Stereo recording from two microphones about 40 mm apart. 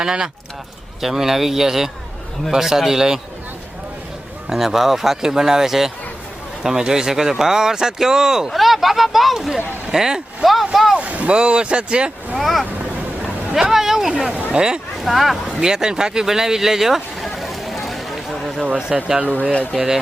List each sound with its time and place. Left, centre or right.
0.0 s speech: centre
4.4 s speech: centre
8.5 s speech: centre
10.9 s boat: right
11.3 s speech: right
12.4 s speech: centre
13.2 s vehicle: centre
14.3 s speech: right
14.5 s speech: centre
15.0 s speech: centre
15.4 s vehicle: centre
18.9 s speech: centre
19.3 s speech: left